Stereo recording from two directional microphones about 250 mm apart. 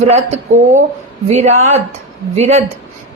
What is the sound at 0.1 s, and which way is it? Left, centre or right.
Speech, right.